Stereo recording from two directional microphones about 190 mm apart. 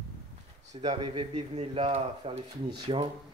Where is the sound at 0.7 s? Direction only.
35° right (ahead or behind).